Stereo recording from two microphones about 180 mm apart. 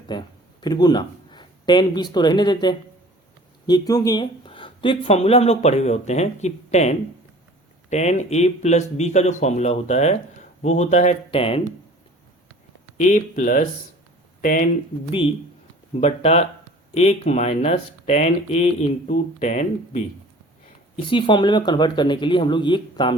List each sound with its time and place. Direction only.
0.1 s a sound: 25° left (ahead or behind)
2.1 s speech: 25° left (ahead or behind)
13.0 s speech: 45° left (ahead or behind)
16.0 s speech: 35° left (ahead or behind)
20.9 s speech: 30° left (ahead or behind)